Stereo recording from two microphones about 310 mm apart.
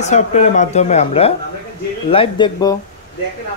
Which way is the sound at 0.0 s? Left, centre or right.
Left.